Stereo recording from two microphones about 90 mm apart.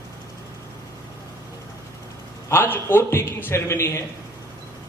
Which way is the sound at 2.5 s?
25° left (ahead or behind).